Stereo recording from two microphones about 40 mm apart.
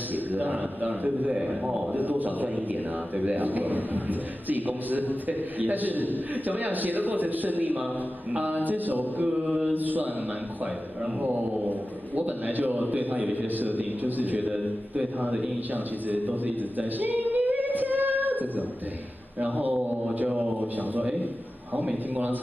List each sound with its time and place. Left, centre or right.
0.1 s a man's voice: right
1.5 s a man's voice: centre
2.0 s a man's voice: right
9.4 s mantra: right
9.8 s a man's voice: right
12.2 s a man's voice: right